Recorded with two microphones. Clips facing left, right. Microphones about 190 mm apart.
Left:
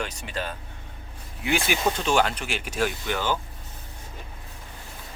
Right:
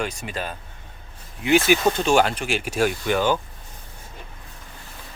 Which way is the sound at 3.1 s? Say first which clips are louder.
Right 9 dB; 50° right (ahead or behind).